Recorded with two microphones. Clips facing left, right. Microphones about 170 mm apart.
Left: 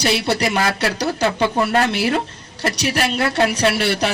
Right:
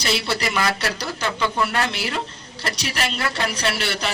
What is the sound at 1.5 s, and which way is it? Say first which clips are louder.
Speech: left 6 dB; 45° left (ahead or behind).